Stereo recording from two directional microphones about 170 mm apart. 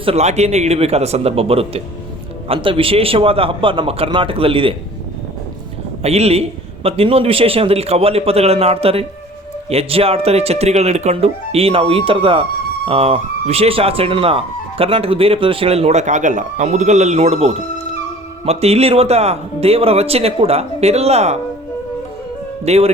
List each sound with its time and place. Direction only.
0.0 s speech: 40° right (ahead or behind)
6.0 s speech: 40° right (ahead or behind)
22.6 s speech: 40° right (ahead or behind)